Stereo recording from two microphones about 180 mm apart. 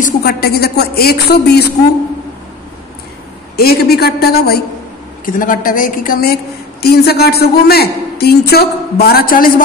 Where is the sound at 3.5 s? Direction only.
60° left (ahead or behind).